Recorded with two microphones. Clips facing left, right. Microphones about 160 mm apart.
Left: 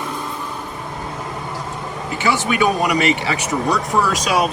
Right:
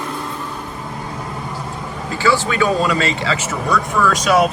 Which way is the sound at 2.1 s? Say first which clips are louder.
Right 2 dB; 20° left (ahead or behind).